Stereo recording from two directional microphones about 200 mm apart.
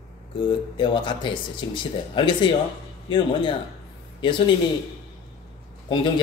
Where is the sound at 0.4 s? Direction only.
25° left (ahead or behind).